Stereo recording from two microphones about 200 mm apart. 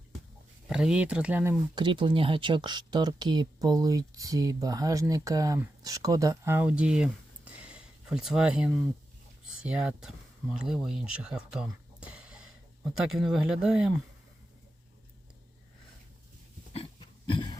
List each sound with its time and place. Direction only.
0.7 s speech: 5° right (ahead or behind)
1.7 s speech: 25° right (ahead or behind); by 13.9 s 5° right (ahead or behind)
17.2 s a sound: 25° left (ahead or behind)